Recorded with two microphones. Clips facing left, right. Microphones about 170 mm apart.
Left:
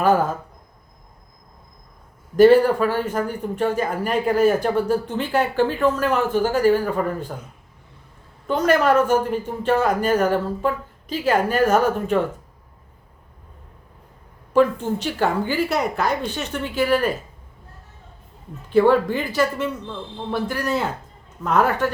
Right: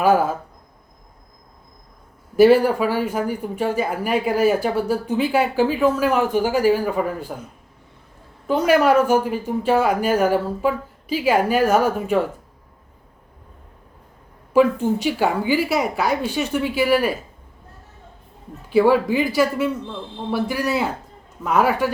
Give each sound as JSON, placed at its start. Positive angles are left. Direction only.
{"t": 0.0, "sound": "speech", "side_deg": -10}
{"t": 2.3, "sound": "speech", "side_deg": -10}
{"t": 8.4, "sound": "speech", "side_deg": -10}
{"t": 14.5, "sound": "speech", "side_deg": -10}
{"t": 18.7, "sound": "speech", "side_deg": -10}